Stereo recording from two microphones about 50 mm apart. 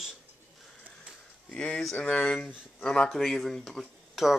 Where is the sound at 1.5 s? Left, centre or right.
Centre.